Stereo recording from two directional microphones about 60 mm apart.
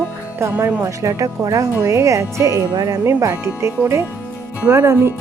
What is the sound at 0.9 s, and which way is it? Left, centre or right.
A woman's voice, right.